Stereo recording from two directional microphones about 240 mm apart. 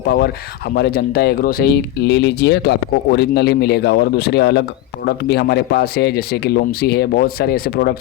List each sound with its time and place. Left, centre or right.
0.7 s a man's voice: left